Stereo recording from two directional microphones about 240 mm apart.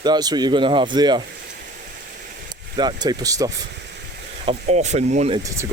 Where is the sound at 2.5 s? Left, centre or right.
Centre.